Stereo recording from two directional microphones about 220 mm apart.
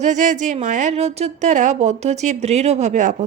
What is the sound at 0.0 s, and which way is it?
Speech, 35° right (ahead or behind).